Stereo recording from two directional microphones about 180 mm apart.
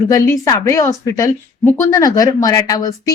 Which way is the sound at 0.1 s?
15° left (ahead or behind).